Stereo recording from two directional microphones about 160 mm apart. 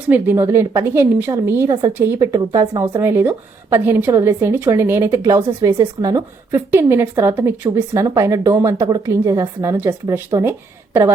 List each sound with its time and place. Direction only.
0.1 s a woman's voice: 15° right (ahead or behind)